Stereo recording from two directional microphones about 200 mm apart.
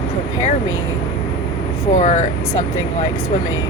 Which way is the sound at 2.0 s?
40° left (ahead or behind).